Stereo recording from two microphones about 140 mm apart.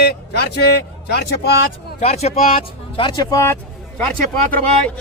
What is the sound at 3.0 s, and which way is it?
Speech, 30° left (ahead or behind).